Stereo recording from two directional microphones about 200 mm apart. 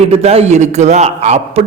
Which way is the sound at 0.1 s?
30° right (ahead or behind).